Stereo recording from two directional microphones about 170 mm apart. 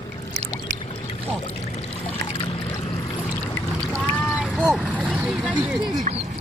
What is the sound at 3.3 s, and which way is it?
Boat, 10° left (ahead or behind).